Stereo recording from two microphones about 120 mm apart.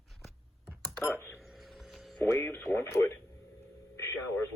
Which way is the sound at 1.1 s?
20° left (ahead or behind).